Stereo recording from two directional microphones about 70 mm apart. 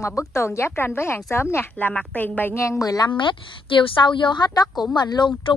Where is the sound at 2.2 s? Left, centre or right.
Left.